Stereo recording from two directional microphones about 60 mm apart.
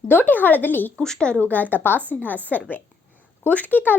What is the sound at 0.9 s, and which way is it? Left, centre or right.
Speech, centre.